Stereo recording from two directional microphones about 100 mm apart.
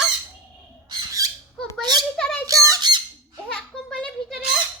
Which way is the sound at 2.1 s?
5° left (ahead or behind).